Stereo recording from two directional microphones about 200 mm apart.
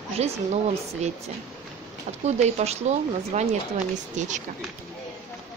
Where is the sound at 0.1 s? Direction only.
30° right (ahead or behind).